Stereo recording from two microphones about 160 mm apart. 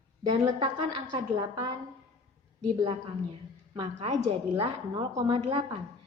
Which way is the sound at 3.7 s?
30° right (ahead or behind).